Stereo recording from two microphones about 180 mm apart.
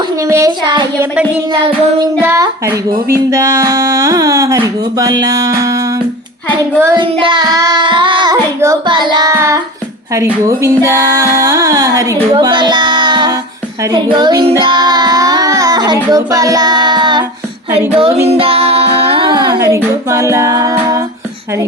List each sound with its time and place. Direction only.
0.2 s speech: 15° right (ahead or behind)
2.2 s music: 15° right (ahead or behind)
3.2 s speech: 15° right (ahead or behind)
6.9 s speech: 25° right (ahead or behind)
10.2 s music: 15° right (ahead or behind)
13.8 s child singing: 20° right (ahead or behind)
17.7 s music: 30° right (ahead or behind)